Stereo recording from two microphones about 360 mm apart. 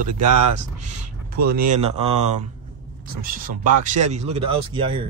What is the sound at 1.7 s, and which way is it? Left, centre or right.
Speech, centre.